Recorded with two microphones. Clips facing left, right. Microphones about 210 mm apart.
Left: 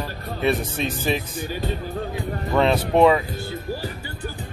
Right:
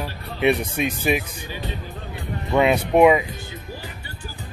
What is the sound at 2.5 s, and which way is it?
Speech, 10° right (ahead or behind).